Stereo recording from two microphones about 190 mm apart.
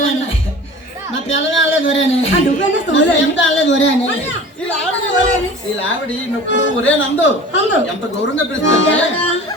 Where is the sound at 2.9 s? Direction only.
75° left (ahead or behind).